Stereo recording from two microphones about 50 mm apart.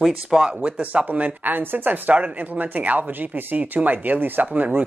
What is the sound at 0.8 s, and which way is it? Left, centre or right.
Speech, right.